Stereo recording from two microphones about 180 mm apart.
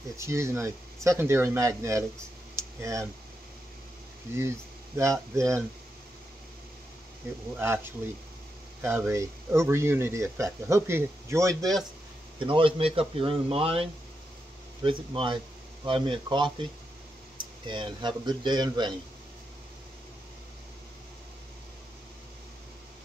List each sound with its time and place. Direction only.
0.2 s speech: 15° right (ahead or behind)
2.5 s a sound: 15° right (ahead or behind)
4.4 s speech: 15° right (ahead or behind)
7.5 s speech: 15° right (ahead or behind)
8.8 s speech: 15° right (ahead or behind)
12.4 s speech: 30° right (ahead or behind)
17.6 s speech: 25° right (ahead or behind)